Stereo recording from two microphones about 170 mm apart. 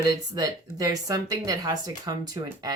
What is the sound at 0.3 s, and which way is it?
Speech, 20° right (ahead or behind).